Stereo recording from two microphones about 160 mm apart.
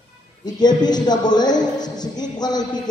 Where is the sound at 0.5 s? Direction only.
25° left (ahead or behind).